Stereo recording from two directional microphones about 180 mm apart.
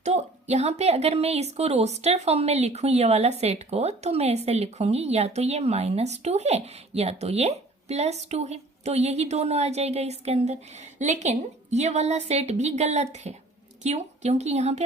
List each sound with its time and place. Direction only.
0.0 s a woman's voice: 35° right (ahead or behind)